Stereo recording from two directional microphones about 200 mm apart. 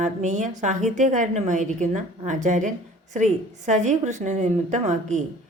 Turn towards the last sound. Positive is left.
turn(degrees=-35)  # may be behind; listen again after turning